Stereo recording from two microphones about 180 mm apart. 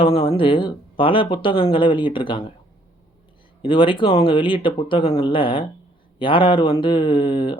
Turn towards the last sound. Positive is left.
turn(degrees=25)  # may be behind; listen again after turning